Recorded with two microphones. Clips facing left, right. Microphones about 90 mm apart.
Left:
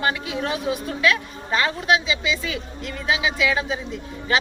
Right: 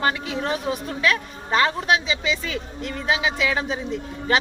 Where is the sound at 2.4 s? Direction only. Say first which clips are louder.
Even; 45° right (ahead or behind).